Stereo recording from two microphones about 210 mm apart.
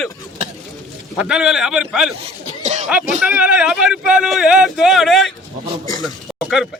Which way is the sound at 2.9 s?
5° right (ahead or behind).